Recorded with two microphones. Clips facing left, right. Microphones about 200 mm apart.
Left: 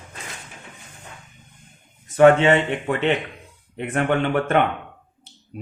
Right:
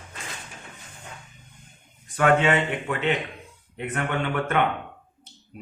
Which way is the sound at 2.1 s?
25° left (ahead or behind).